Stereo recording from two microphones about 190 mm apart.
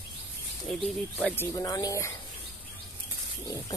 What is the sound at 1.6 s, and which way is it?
Speech, 20° left (ahead or behind).